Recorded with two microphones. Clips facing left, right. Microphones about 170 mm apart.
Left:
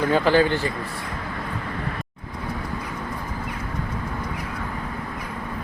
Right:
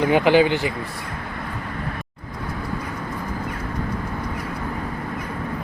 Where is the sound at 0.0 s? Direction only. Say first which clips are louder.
Right 2 dB; 15° right (ahead or behind).